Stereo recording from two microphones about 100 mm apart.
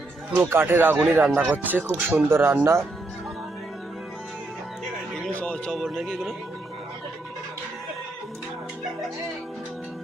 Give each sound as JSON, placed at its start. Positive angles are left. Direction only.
{"t": 0.3, "sound": "speech", "side_deg": -20}
{"t": 5.3, "sound": "music", "side_deg": 10}
{"t": 5.8, "sound": "speech", "side_deg": -5}